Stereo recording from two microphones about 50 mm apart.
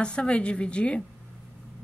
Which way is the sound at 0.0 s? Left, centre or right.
Centre.